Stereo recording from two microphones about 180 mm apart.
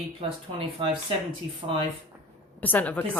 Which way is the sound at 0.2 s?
30° right (ahead or behind).